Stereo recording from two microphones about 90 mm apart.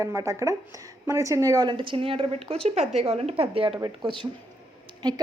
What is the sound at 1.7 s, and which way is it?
Speech, 65° right (ahead or behind).